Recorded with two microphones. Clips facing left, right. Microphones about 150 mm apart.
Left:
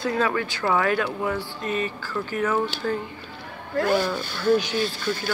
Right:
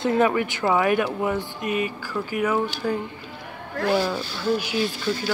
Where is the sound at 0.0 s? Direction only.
20° right (ahead or behind).